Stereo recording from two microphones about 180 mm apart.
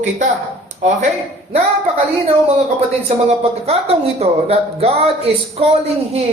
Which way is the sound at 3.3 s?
35° right (ahead or behind).